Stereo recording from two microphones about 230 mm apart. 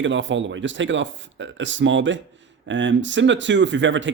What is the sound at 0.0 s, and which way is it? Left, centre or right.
Speech, right.